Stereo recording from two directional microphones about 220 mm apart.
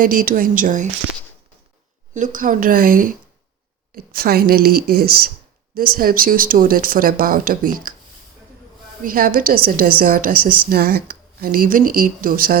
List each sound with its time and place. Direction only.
0.0 s speech: 40° right (ahead or behind)
2.1 s speech: 35° right (ahead or behind)
9.0 s speech: 40° right (ahead or behind)